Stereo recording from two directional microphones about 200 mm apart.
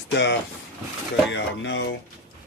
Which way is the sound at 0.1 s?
60° left (ahead or behind).